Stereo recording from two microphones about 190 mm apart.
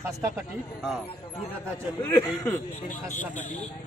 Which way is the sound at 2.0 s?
10° left (ahead or behind).